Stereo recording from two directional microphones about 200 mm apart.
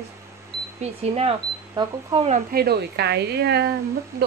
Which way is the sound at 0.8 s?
30° right (ahead or behind).